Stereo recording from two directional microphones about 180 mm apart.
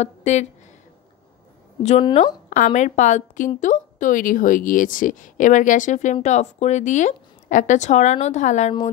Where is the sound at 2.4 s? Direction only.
45° left (ahead or behind).